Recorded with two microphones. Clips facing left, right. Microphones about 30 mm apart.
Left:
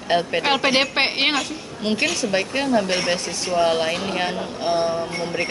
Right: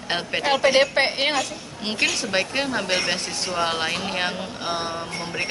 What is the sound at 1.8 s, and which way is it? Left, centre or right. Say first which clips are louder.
A woman's voice: left 2 dB; centre.